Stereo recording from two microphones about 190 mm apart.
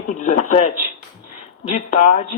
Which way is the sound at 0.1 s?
40° left (ahead or behind).